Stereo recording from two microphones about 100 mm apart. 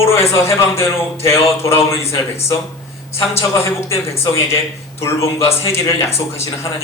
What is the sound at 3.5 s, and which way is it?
A man's voice, 30° left (ahead or behind).